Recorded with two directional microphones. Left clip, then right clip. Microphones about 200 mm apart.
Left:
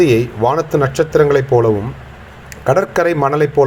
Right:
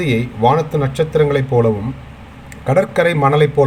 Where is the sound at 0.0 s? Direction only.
25° left (ahead or behind).